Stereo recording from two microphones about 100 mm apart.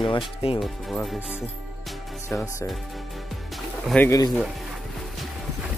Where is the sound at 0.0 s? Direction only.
65° left (ahead or behind).